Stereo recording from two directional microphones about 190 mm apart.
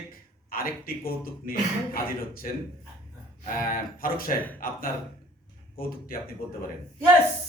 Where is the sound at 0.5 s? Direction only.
50° left (ahead or behind).